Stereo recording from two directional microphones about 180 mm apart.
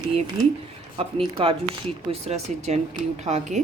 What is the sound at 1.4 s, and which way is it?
Speech, 30° right (ahead or behind).